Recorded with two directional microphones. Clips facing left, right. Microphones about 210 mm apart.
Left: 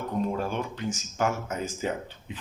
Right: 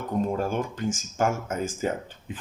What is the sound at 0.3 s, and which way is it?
Speech, 45° right (ahead or behind).